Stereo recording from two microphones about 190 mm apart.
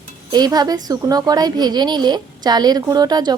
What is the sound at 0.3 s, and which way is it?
A woman's voice, 20° right (ahead or behind).